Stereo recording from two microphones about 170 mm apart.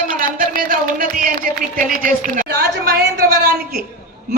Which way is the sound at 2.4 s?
75° right (ahead or behind).